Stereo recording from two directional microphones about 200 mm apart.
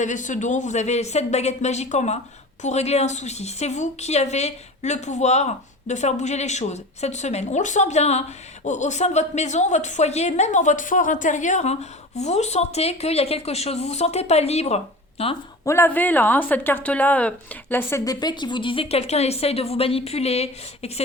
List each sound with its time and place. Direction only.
0.0 s a woman's voice: 40° left (ahead or behind)
15.6 s a woman's voice: 15° left (ahead or behind); by 21.0 s 30° left (ahead or behind)